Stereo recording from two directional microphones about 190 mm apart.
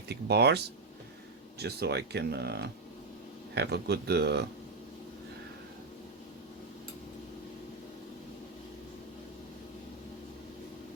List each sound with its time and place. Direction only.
0.1 s speech: 60° right (ahead or behind)